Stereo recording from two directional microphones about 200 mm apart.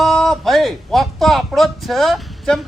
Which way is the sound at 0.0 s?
Centre (ahead or behind).